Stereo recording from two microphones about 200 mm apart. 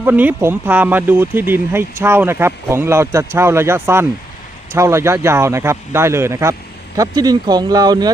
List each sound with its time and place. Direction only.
0.0 s speech: 10° right (ahead or behind)